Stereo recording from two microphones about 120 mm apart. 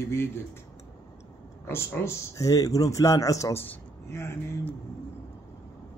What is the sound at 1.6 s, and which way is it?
Speech, 20° left (ahead or behind).